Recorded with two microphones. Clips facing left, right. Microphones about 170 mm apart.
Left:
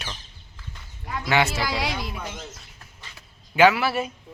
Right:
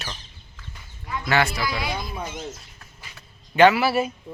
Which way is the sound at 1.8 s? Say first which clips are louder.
Left 1 dB; 80° left.